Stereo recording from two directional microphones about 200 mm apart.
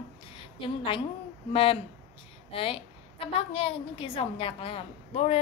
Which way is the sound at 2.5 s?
30° left (ahead or behind).